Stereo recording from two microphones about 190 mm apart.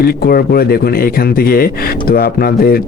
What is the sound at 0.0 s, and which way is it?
Speech, 55° left (ahead or behind).